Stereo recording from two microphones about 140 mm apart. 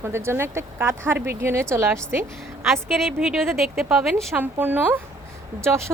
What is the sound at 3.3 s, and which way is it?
A woman's voice, centre (ahead or behind).